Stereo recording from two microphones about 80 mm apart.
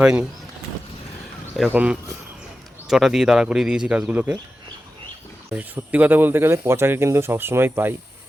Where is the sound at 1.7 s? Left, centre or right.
Centre.